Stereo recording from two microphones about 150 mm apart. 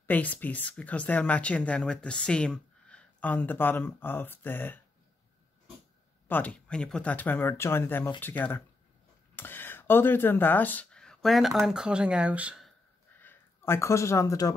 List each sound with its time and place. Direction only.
0.0 s speech: 10° left (ahead or behind)
6.2 s speech: 10° left (ahead or behind); by 12.7 s 5° right (ahead or behind)
13.2 s speech: 15° left (ahead or behind)